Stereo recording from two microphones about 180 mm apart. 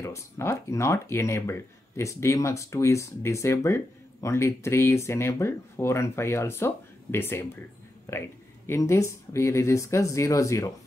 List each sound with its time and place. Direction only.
0.0 s speech: 15° left (ahead or behind)